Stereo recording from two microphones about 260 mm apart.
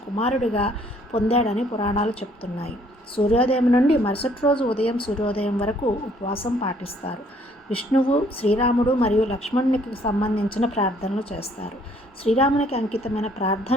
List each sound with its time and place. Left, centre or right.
0.2 s a woman's voice: left